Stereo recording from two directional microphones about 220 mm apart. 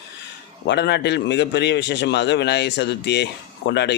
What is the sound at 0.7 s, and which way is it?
Speech, 50° left (ahead or behind).